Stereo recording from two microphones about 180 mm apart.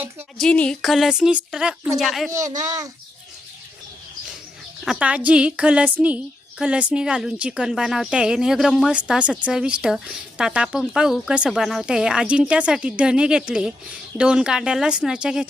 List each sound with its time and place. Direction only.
0.3 s speech: 5° left (ahead or behind)
2.3 s speech: 20° right (ahead or behind)
4.9 s speech: 5° right (ahead or behind)